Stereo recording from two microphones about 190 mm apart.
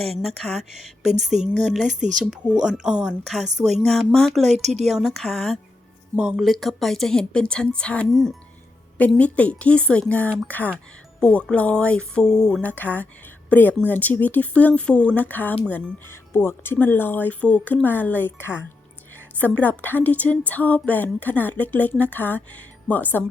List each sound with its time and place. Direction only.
0.0 s speech: centre (ahead or behind)
4.5 s speech: 35° right (ahead or behind)
4.9 s speech: centre (ahead or behind)